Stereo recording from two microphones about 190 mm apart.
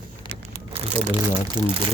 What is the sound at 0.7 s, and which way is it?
Crumpling, 30° right (ahead or behind).